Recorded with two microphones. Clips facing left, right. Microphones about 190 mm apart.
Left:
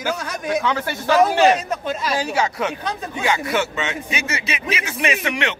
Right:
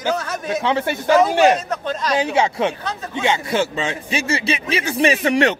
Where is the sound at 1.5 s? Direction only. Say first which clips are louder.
Right 1 dB; 10° left (ahead or behind).